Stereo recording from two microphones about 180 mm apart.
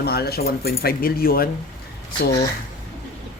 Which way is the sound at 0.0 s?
60° left (ahead or behind).